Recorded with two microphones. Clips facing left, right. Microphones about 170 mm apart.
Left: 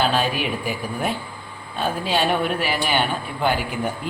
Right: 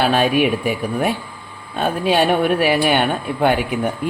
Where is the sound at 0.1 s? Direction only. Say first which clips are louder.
Right 7 dB; 65° right (ahead or behind).